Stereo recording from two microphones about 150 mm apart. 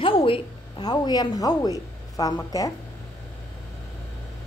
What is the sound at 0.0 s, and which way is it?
A woman's voice, 35° left (ahead or behind).